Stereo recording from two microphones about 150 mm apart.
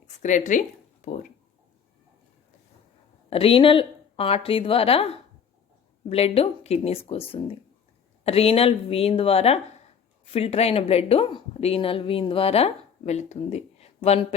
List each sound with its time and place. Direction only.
0.2 s speech: 55° left (ahead or behind)
3.2 s a woman's voice: 40° left (ahead or behind)